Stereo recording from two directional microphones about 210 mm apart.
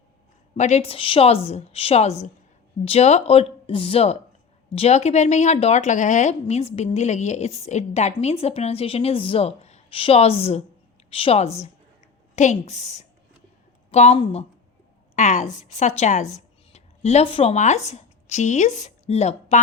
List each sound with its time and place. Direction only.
0.5 s a woman's voice: 35° left (ahead or behind)